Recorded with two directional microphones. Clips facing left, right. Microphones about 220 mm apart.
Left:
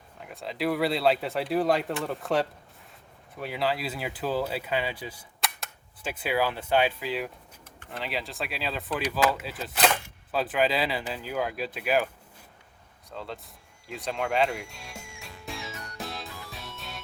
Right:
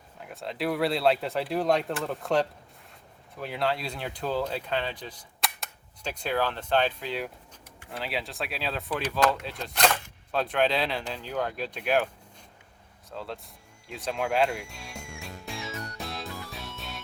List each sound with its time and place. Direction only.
0.2 s speech: centre (ahead or behind)
13.1 s speech: centre (ahead or behind)
15.4 s music: centre (ahead or behind)